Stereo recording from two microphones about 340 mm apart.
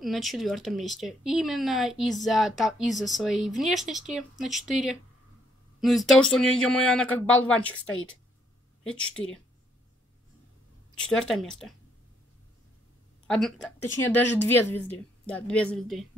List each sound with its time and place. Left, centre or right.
0.0 s speech: centre
7.9 s speech: left
8.8 s speech: centre
11.0 s speech: centre
13.3 s speech: centre